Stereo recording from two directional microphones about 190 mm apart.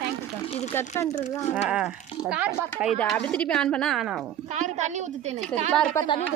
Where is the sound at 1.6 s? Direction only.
5° right (ahead or behind).